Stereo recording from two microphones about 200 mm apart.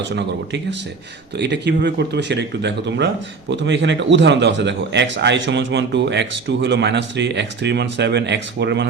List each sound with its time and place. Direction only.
0.2 s speech: 60° right (ahead or behind)